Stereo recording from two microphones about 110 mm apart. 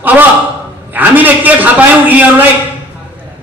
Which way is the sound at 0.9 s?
15° right (ahead or behind).